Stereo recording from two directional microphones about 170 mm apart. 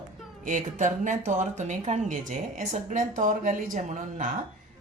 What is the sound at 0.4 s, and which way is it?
A woman's voice, 45° right (ahead or behind).